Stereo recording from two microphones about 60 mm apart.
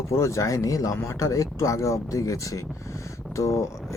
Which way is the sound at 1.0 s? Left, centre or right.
Left.